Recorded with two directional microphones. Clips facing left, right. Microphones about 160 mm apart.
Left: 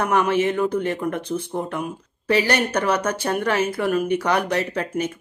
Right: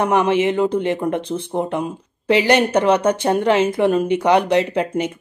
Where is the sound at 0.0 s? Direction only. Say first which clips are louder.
Right 3 dB; 20° right (ahead or behind).